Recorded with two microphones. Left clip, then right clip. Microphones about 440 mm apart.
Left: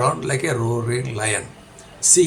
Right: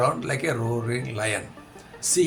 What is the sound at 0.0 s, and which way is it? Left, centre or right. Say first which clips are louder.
Speech: left 3 dB; right.